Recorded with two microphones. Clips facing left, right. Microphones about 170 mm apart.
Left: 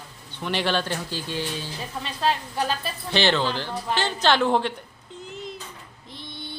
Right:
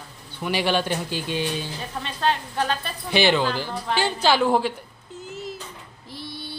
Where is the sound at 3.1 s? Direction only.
10° right (ahead or behind).